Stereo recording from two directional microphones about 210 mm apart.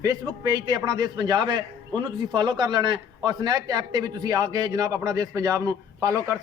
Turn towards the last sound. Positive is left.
turn(degrees=-15)  # may be behind; listen again after turning